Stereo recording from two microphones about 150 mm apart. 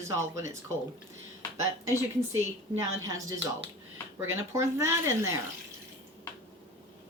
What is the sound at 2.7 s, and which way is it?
Speech, 20° right (ahead or behind).